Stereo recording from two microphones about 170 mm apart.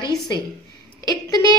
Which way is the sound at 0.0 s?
25° left (ahead or behind).